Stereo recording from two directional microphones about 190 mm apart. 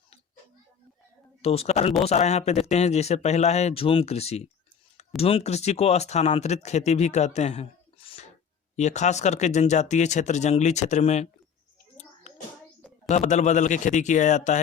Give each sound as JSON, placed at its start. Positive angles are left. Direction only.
{"t": 1.4, "sound": "speech", "side_deg": 30}
{"t": 12.3, "sound": "a sound", "side_deg": 35}
{"t": 13.1, "sound": "speech", "side_deg": 40}